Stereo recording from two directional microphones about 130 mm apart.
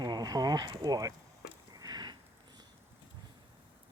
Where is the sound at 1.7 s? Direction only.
30° right (ahead or behind).